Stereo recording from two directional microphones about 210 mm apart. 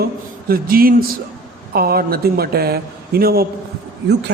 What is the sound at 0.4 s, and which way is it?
A man's voice, 45° right (ahead or behind).